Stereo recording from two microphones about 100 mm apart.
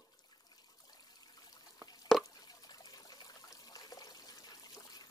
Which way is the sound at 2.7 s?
45° left (ahead or behind).